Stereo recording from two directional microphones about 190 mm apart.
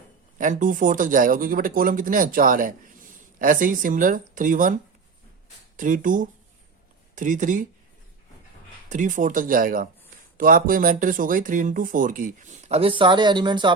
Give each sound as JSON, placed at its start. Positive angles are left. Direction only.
{"t": 0.3, "sound": "speech", "side_deg": -45}
{"t": 8.9, "sound": "speech", "side_deg": -40}